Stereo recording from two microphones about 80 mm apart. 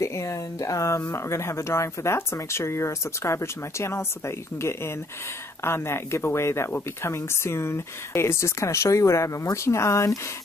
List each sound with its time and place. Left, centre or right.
0.0 s speech: left